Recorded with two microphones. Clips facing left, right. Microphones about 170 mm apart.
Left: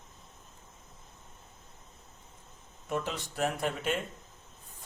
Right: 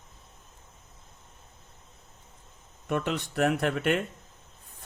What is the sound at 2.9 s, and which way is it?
A man's voice, 65° right (ahead or behind).